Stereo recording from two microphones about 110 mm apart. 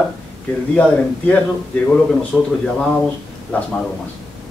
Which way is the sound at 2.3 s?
5° right (ahead or behind).